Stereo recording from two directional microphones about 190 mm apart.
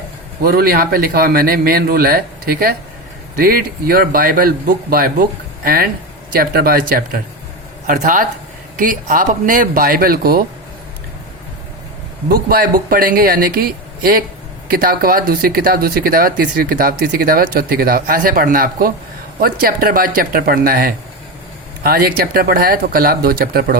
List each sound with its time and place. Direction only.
0.4 s speech: 55° right (ahead or behind)
12.3 s speech: 50° right (ahead or behind)